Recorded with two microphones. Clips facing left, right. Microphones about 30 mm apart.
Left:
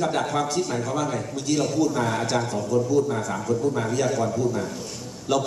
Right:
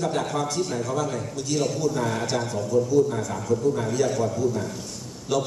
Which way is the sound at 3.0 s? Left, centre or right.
Centre.